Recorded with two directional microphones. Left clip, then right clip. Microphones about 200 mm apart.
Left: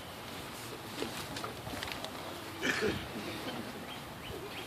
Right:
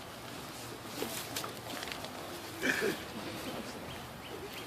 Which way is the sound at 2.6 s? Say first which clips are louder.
Right 1 dB; 40° left (ahead or behind).